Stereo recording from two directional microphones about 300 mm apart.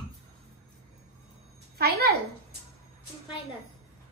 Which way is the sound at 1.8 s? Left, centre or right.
Right.